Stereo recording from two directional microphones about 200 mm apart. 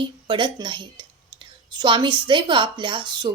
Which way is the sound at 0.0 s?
25° right (ahead or behind).